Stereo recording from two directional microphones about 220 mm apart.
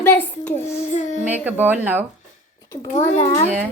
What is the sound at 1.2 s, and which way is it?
Speech, 10° right (ahead or behind).